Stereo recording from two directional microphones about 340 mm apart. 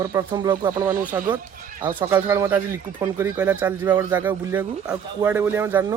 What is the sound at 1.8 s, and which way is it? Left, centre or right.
Speech, centre.